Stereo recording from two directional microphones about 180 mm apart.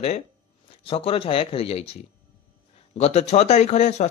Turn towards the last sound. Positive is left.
turn(degrees=40)  # may be behind; listen again after turning